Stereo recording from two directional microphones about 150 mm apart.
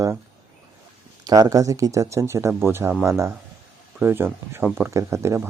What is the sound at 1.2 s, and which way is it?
Speech, 25° right (ahead or behind).